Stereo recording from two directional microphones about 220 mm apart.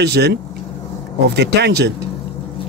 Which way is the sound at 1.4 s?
50° right (ahead or behind).